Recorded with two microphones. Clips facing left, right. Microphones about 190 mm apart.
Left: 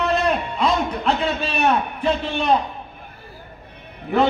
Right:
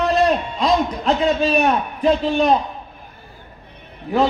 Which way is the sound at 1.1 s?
40° right (ahead or behind).